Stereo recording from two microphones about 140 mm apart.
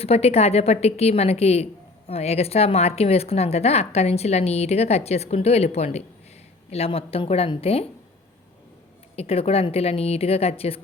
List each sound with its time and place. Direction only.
0.0 s a woman's voice: 45° left (ahead or behind)
9.1 s a woman's voice: 45° left (ahead or behind)